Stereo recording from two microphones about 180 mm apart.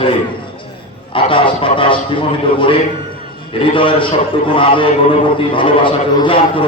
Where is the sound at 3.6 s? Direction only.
30° left (ahead or behind).